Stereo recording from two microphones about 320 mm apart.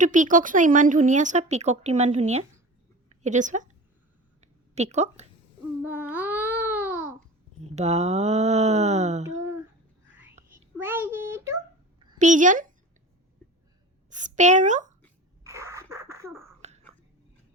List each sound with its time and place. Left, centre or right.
0.0 s a woman's voice: right
4.4 s a sound: right
5.8 s babbling: centre
7.8 s a woman's voice: centre
10.5 s a sound: centre
12.2 s a woman's voice: right
14.1 s a woman's voice: right
15.4 s sneeze: centre
16.6 s a sound: right